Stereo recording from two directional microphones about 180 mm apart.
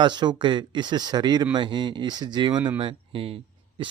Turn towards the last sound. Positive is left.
turn(degrees=-30)  # may be behind; listen again after turning